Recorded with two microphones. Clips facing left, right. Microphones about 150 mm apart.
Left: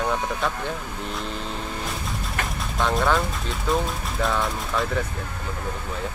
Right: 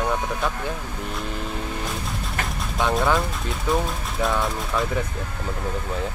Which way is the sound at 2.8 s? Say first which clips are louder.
Right 1 dB; centre (ahead or behind).